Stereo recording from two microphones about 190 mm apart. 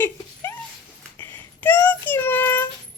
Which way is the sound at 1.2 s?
10° left (ahead or behind).